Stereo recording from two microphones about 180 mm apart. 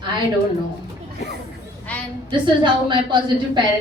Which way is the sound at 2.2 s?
25° right (ahead or behind).